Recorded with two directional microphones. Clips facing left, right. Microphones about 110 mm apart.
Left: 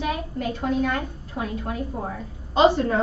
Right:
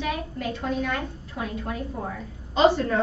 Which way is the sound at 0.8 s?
40° left (ahead or behind).